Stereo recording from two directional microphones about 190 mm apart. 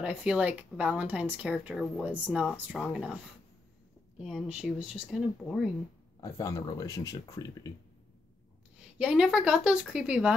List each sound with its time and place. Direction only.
0.0 s speech: 5° right (ahead or behind)
4.2 s speech: 5° right (ahead or behind)
6.2 s speech: 20° left (ahead or behind)
8.9 s speech: 5° right (ahead or behind)